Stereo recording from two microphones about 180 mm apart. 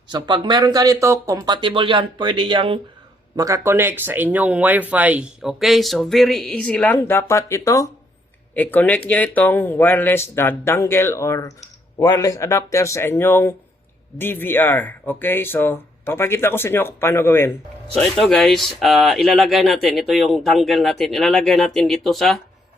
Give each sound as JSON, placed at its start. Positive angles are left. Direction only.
{"t": 0.1, "sound": "speech", "side_deg": -25}
{"t": 3.3, "sound": "speech", "side_deg": -20}
{"t": 18.2, "sound": "speech", "side_deg": 0}